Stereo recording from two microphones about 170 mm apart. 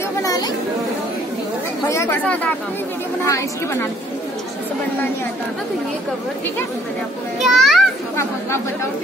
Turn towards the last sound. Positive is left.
turn(degrees=0)  # may be behind; listen again after turning